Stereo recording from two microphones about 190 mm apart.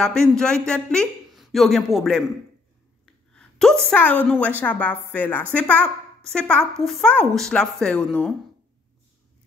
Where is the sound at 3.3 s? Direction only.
5° left (ahead or behind).